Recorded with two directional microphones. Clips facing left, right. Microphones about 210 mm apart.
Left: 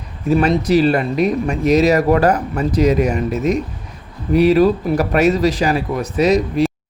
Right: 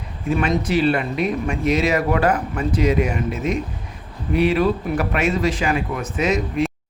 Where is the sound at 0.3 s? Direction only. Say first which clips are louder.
Left 6 dB; 40° left (ahead or behind).